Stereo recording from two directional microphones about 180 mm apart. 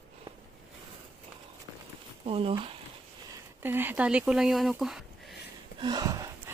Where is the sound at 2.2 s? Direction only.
30° right (ahead or behind).